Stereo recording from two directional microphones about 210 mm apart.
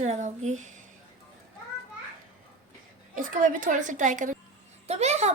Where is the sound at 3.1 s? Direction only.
40° right (ahead or behind).